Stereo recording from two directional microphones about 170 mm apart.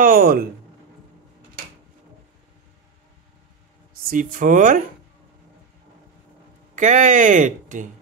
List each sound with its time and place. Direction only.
0.0 s speech: 60° right (ahead or behind)
4.1 s speech: 55° right (ahead or behind)
6.7 s speech: 45° right (ahead or behind)